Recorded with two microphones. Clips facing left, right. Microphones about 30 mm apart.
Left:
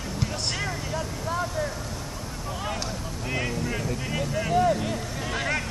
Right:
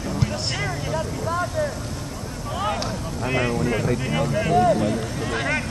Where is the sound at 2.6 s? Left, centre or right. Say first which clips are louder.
Right 7 dB; centre.